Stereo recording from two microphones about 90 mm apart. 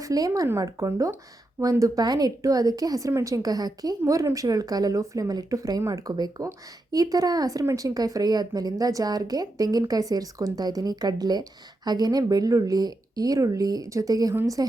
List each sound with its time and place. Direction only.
0.0 s a woman's voice: 40° right (ahead or behind)